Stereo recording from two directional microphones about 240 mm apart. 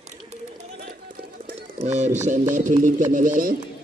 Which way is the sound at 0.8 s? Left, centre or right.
Right.